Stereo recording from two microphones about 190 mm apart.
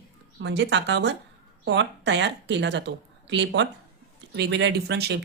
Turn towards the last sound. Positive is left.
turn(degrees=-60)  # may be behind; listen again after turning